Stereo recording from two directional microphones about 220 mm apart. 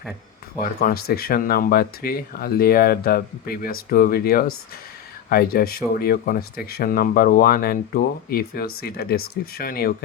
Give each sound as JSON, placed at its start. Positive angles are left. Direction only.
{"t": 0.6, "sound": "speech", "side_deg": 40}